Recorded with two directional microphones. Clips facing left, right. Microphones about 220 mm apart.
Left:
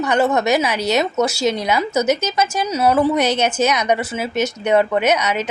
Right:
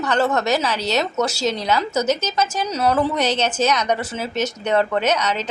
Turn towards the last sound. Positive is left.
turn(degrees=10)  # may be behind; listen again after turning